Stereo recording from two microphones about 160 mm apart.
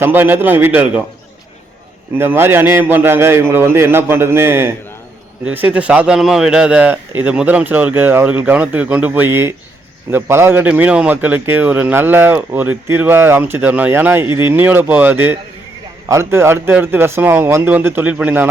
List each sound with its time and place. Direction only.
0.0 s a man's voice: 10° right (ahead or behind)
2.1 s a man's voice: 15° right (ahead or behind)
14.3 s speech: 30° left (ahead or behind)
14.5 s a man's voice: 10° right (ahead or behind)